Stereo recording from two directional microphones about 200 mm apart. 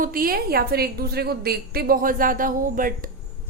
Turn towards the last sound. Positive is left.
turn(degrees=-45)  # may be behind; listen again after turning